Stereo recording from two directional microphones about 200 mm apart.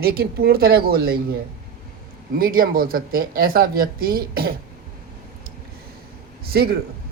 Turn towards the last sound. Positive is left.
turn(degrees=-50)  # may be behind; listen again after turning